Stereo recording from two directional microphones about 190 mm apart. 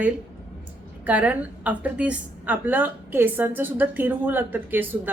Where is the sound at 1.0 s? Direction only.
10° right (ahead or behind).